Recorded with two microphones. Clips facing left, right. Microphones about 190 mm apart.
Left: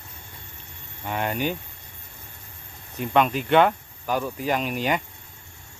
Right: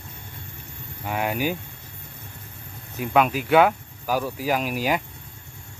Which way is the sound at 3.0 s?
5° right (ahead or behind).